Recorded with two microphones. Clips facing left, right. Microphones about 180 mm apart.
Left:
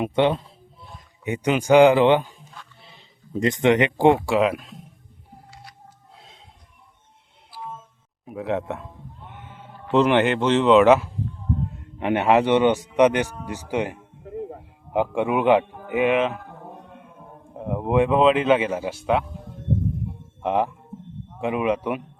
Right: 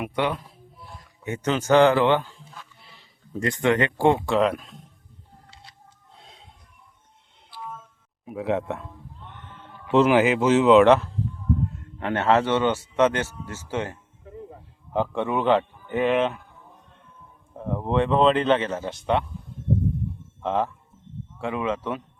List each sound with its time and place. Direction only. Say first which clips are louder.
0.0 s speech: left 6 dB; 25° left (ahead or behind)
4.4 s speech: left 1 dB; centre (ahead or behind)
6.1 s a sound: left 1 dB; centre (ahead or behind)
8.3 s a sound: even; centre (ahead or behind)
9.9 s speech: even; centre (ahead or behind)
11.6 s a man's voice: left 2 dB; 20° left (ahead or behind)
15.6 s a sound: left 10 dB; 60° left (ahead or behind)
15.9 s speech: left 1 dB; 5° left (ahead or behind)
16.4 s music: left 11 dB; 65° left (ahead or behind)
17.6 s speech: left 3 dB; 15° left (ahead or behind)
19.4 s a sound: left 3 dB; 70° left (ahead or behind)
20.4 s speech: left 2 dB; 15° left (ahead or behind)